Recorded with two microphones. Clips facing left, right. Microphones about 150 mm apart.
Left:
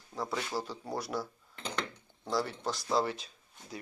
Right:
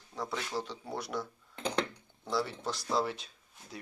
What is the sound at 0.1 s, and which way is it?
Speech, 5° left (ahead or behind).